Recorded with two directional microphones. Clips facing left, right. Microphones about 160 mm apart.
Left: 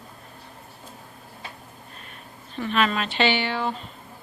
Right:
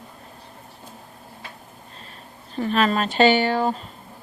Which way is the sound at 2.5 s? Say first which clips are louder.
Right 3 dB; 40° right (ahead or behind).